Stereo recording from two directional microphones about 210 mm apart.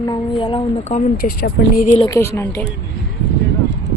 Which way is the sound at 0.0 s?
20° left (ahead or behind).